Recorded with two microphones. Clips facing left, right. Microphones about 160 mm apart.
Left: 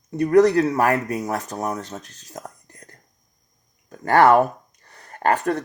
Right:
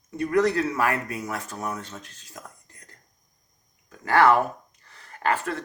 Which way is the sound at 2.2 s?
40° left (ahead or behind).